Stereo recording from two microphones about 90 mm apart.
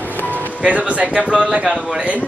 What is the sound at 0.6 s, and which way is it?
A man's voice, 15° right (ahead or behind).